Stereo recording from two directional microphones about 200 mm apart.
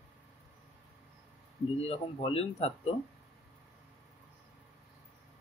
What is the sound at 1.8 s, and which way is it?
Speech, 30° left (ahead or behind).